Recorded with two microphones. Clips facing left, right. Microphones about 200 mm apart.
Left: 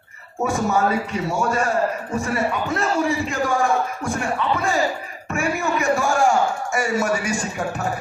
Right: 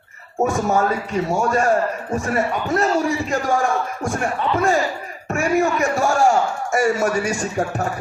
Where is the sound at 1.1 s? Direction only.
45° right (ahead or behind).